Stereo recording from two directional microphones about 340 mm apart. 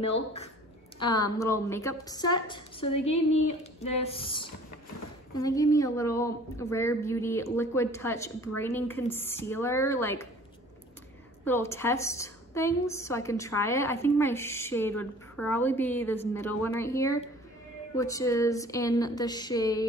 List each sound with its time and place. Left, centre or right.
0.9 s a woman's voice: centre
11.4 s a woman's voice: centre